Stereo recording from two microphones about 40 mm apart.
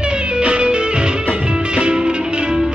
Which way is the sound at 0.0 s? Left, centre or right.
Right.